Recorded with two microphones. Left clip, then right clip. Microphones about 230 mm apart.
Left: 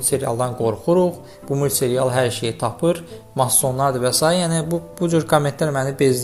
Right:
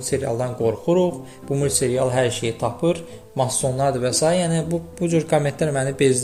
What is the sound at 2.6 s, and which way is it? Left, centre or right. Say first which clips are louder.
Speech: left 3 dB; left.